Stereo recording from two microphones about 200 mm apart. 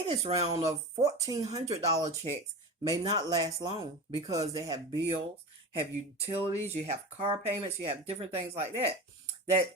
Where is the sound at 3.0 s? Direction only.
20° right (ahead or behind).